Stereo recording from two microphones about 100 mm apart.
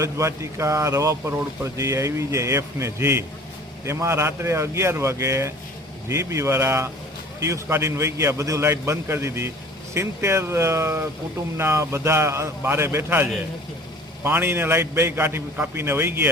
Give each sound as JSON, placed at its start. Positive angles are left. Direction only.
{"t": 0.0, "sound": "a man's voice", "side_deg": -30}
{"t": 14.3, "sound": "a man's voice", "side_deg": -20}